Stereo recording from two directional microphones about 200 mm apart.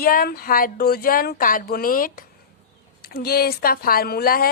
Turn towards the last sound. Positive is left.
turn(degrees=50)  # may be behind; listen again after turning